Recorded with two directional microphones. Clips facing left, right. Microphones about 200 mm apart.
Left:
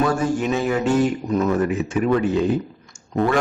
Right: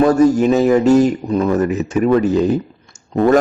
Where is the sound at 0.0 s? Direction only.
40° right (ahead or behind).